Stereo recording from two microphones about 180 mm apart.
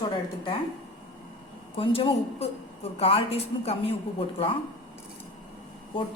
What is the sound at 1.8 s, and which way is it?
A woman's voice, 30° left (ahead or behind).